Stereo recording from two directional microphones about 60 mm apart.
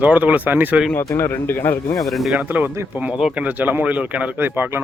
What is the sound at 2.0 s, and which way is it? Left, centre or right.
Speech, centre.